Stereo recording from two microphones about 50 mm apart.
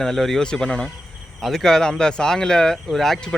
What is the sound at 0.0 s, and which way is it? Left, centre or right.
Speech, centre.